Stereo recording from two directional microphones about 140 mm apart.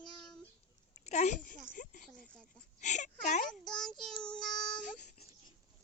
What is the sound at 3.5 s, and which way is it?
Child singing, 5° left (ahead or behind).